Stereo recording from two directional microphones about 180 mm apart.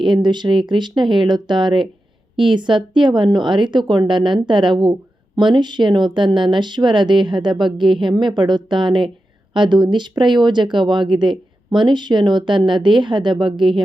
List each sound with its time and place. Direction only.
0.0 s speech: 25° right (ahead or behind)